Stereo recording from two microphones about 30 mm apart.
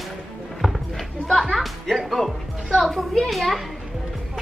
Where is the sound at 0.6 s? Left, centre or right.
Centre.